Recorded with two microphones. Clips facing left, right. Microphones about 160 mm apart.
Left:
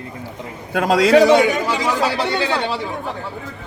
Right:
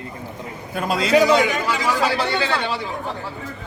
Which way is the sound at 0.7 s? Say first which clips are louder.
Left 7 dB; 90° left.